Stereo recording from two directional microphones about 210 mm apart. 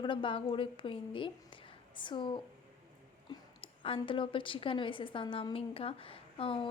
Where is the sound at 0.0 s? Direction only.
25° left (ahead or behind).